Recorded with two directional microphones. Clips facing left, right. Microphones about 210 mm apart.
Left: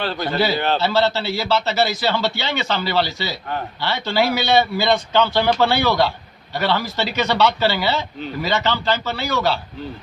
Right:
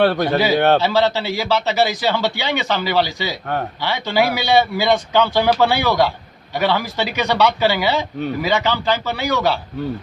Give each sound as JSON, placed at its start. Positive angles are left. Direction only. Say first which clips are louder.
{"t": 0.0, "sound": "a man's voice", "louder": "right 9 dB", "side_deg": -65}
{"t": 0.8, "sound": "speech", "louder": "right 2 dB", "side_deg": -15}